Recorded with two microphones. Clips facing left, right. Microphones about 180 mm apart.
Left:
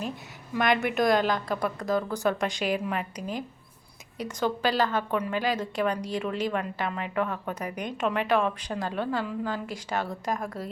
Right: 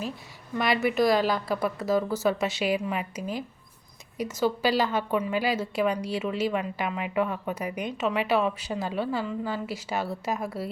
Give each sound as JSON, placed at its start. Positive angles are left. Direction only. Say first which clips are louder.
{"t": 0.5, "sound": "a woman's voice", "louder": "even", "side_deg": -5}